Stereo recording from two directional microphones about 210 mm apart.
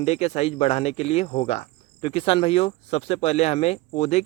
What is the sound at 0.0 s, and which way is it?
Speech, 30° left (ahead or behind).